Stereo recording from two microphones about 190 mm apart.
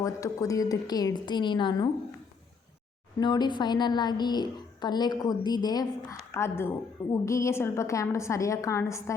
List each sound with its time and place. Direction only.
0.0 s a child's voice: 15° left (ahead or behind)
3.2 s a child's voice: 20° left (ahead or behind)